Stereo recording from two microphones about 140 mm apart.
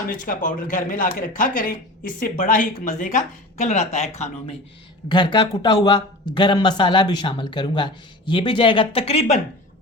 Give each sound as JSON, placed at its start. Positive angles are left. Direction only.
{"t": 0.1, "sound": "speech", "side_deg": 70}
{"t": 2.4, "sound": "speech", "side_deg": 65}
{"t": 5.0, "sound": "speech", "side_deg": 35}